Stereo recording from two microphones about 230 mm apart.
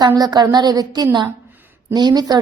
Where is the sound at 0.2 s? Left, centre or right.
Centre.